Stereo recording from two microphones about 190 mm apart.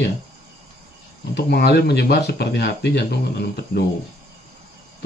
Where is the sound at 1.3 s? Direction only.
60° left (ahead or behind).